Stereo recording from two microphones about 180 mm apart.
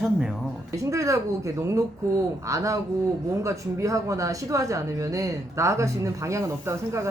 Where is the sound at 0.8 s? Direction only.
15° right (ahead or behind).